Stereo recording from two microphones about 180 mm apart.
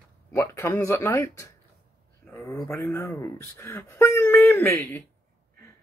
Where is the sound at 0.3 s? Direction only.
15° left (ahead or behind).